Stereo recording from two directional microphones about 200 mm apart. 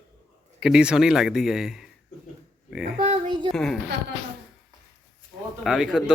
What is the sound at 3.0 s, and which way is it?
Speech, 35° right (ahead or behind).